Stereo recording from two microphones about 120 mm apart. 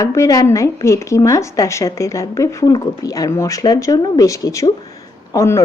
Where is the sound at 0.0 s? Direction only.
25° left (ahead or behind).